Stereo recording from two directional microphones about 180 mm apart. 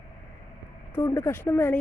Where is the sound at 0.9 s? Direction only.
10° left (ahead or behind).